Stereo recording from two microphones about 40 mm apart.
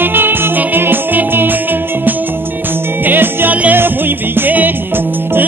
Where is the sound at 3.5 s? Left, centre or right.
Right.